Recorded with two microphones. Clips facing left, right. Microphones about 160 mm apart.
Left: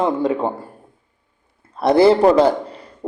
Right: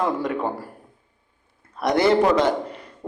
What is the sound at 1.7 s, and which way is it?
A man's voice, 30° left (ahead or behind).